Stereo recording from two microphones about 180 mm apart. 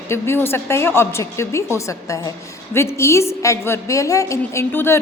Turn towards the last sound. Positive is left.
turn(degrees=10)  # may be behind; listen again after turning